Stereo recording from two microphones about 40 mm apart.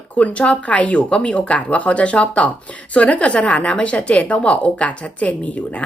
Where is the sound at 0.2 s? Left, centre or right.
Left.